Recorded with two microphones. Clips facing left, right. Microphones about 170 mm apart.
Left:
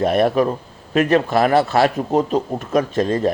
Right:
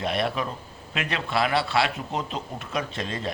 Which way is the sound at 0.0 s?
45° left (ahead or behind).